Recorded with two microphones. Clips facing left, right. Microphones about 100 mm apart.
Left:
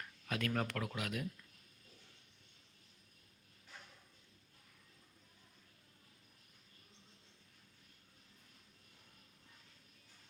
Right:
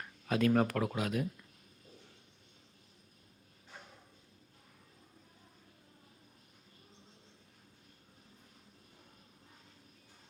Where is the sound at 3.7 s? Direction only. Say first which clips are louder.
Right 4 dB; 30° right (ahead or behind).